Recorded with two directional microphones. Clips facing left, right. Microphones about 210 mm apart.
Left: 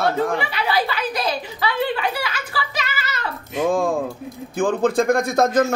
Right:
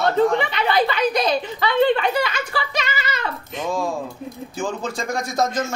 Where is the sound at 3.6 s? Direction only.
55° left (ahead or behind).